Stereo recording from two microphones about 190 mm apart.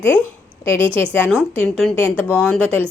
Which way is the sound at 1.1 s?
5° left (ahead or behind).